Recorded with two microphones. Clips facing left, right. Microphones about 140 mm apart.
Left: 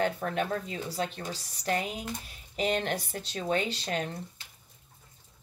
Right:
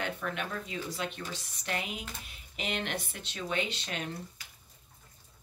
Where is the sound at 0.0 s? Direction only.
40° left (ahead or behind).